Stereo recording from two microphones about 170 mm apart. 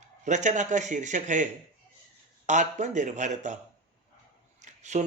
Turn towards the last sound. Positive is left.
turn(degrees=-45)  # may be behind; listen again after turning